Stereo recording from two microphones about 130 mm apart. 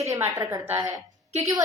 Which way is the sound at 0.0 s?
25° right (ahead or behind).